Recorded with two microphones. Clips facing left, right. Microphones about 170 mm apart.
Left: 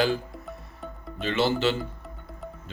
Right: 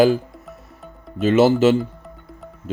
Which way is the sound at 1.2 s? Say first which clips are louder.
Right 10 dB; 45° right (ahead or behind).